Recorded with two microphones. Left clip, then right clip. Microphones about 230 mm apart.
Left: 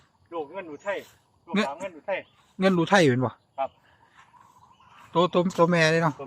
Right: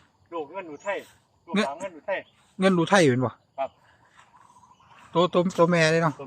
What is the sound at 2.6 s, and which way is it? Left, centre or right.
Speech, centre.